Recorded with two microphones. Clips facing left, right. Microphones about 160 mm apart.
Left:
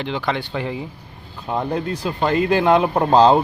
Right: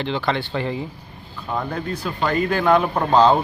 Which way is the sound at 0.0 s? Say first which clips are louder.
Right 1 dB; 10° left (ahead or behind).